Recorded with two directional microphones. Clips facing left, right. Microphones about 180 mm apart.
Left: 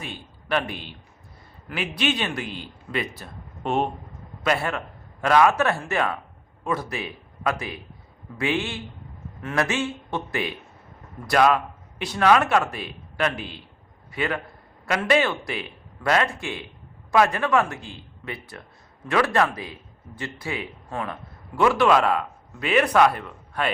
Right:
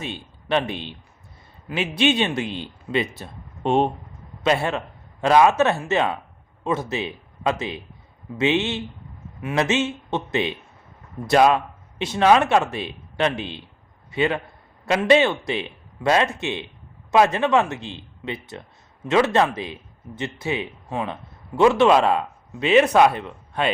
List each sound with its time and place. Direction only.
0.0 s a man's voice: 25° right (ahead or behind)